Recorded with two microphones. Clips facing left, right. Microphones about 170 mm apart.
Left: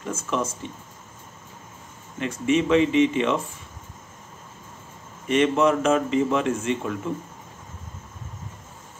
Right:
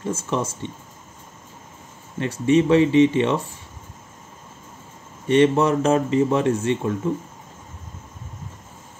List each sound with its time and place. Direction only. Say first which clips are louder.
0.0 s speech: right 2 dB; 30° right (ahead or behind)
2.1 s speech: right 4 dB; 35° right (ahead or behind)
5.3 s speech: right 3 dB; 30° right (ahead or behind)